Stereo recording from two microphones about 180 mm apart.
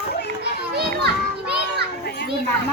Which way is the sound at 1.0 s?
65° right (ahead or behind).